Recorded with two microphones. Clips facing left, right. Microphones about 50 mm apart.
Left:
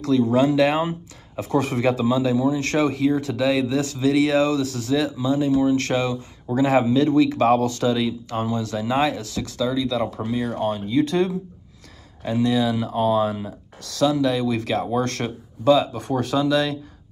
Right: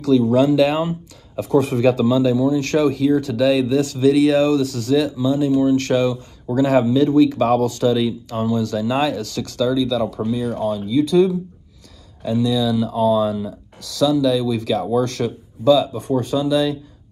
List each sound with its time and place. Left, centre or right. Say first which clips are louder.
0.0 s speech: right 3 dB; left
16.1 s speech: right 1 dB; left